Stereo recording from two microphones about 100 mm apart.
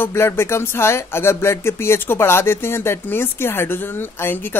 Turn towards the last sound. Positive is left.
turn(degrees=20)  # may be behind; listen again after turning